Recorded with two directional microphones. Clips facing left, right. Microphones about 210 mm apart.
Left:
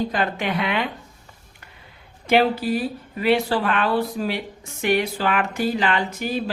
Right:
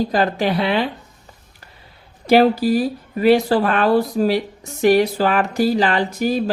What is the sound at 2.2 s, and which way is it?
Speech, 40° right (ahead or behind).